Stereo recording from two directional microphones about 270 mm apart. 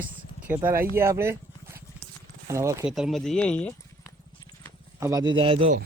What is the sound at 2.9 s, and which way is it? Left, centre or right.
Speech, centre.